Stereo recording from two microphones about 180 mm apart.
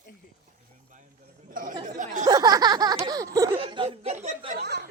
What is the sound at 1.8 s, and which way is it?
Speech, 45° right (ahead or behind).